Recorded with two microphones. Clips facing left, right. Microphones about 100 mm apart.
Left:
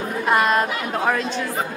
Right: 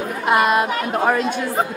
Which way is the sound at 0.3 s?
5° right (ahead or behind).